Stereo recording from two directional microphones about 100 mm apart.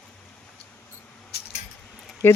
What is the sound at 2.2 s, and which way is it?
Speech, 25° left (ahead or behind).